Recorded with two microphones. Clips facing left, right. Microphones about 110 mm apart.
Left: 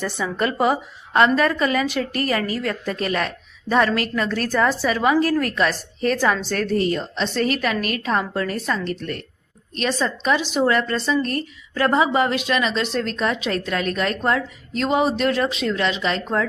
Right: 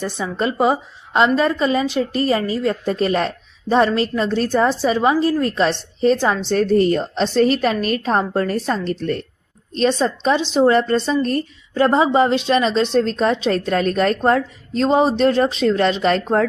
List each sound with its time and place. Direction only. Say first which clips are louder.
0.0 s a woman's voice: right 1 dB; 20° right (ahead or behind)
6.7 s a woman's voice: right 5 dB; 40° right (ahead or behind)